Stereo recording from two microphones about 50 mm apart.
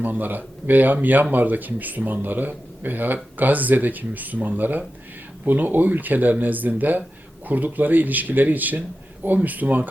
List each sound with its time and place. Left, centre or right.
0.0 s speech: right